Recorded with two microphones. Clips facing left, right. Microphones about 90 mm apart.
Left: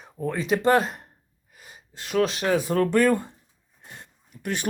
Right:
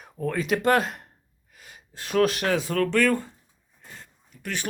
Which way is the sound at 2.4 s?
10° left (ahead or behind).